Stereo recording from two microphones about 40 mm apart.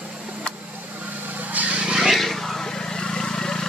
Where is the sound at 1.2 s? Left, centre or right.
Right.